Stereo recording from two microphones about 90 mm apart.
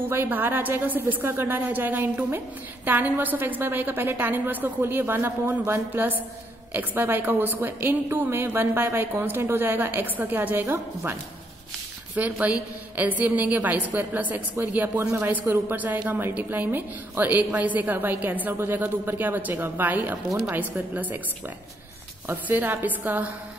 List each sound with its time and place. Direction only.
0.0 s a woman's voice: 25° right (ahead or behind)
12.2 s a woman's voice: 15° right (ahead or behind)
22.3 s a woman's voice: 20° right (ahead or behind)